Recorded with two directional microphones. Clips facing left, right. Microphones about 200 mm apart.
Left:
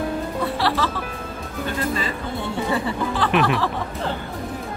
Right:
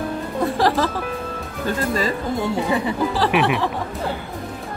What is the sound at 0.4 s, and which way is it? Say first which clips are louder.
Music: right 6 dB; 45° right (ahead or behind).